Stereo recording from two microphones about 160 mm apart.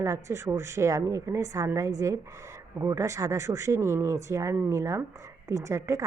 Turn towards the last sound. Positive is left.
turn(degrees=-20)  # may be behind; listen again after turning